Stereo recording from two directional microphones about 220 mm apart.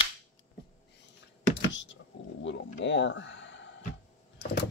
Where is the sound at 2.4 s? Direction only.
55° left (ahead or behind).